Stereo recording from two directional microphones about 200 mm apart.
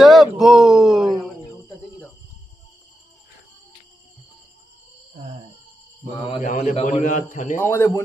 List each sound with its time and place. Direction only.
0.0 s speech: centre (ahead or behind)
6.4 s a man's voice: 40° left (ahead or behind)
7.5 s speech: 10° left (ahead or behind)